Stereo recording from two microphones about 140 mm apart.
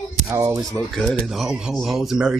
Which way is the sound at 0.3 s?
25° right (ahead or behind).